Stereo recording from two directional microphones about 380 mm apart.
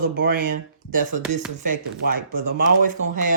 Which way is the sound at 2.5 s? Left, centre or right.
Right.